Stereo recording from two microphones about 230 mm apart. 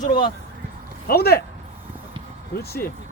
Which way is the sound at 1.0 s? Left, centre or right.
Left.